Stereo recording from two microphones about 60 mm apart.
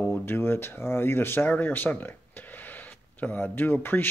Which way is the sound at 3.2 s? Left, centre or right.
Left.